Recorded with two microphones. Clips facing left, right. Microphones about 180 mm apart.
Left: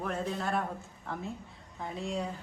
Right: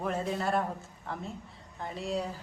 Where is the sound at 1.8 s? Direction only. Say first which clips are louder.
Right 1 dB; centre (ahead or behind).